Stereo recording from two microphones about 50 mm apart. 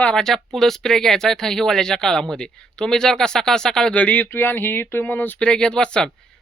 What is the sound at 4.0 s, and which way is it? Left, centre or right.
Speech, left.